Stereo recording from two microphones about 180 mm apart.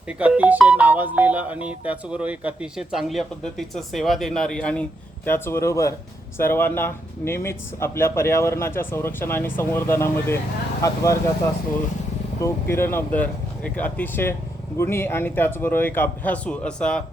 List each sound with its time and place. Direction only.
0.1 s speech: 5° right (ahead or behind); by 11.2 s 15° left (ahead or behind)
12.4 s speech: 15° left (ahead or behind)